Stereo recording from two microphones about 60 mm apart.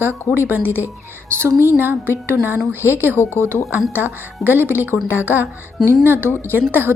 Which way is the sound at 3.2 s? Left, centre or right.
Left.